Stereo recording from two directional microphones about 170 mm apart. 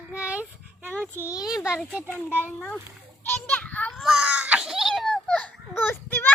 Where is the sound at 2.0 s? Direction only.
10° left (ahead or behind).